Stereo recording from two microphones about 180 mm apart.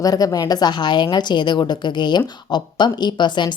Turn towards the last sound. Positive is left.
turn(degrees=25)  # may be behind; listen again after turning